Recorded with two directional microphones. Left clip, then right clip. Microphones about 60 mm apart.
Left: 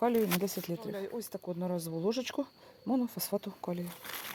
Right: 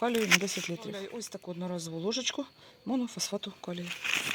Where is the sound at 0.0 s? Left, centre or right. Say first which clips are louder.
Right 3 dB; left.